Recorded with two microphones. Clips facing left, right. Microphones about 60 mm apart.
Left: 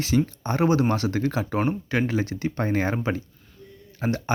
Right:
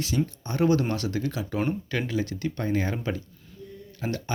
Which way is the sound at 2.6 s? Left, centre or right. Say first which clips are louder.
Left 4 dB; left.